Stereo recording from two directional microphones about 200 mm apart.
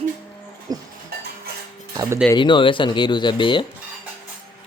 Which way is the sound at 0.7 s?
20° right (ahead or behind).